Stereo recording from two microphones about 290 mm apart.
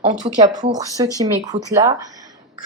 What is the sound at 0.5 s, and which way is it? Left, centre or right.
Speech, centre.